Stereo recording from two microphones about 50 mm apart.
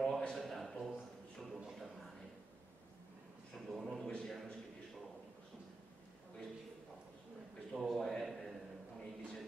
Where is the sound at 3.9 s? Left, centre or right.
Centre.